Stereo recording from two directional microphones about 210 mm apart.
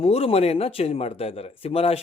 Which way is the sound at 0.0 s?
30° left (ahead or behind).